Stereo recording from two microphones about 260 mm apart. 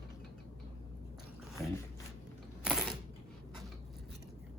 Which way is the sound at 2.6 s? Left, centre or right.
Centre.